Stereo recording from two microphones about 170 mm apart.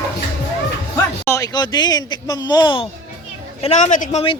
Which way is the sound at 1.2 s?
20° left (ahead or behind).